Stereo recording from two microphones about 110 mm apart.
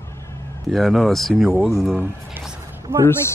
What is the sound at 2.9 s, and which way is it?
Speech, 20° right (ahead or behind).